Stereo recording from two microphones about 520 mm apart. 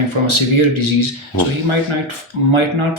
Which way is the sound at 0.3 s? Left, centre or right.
Right.